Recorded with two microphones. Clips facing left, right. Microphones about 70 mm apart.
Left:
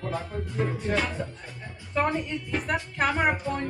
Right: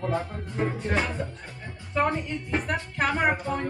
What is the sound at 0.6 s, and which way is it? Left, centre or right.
Music, right.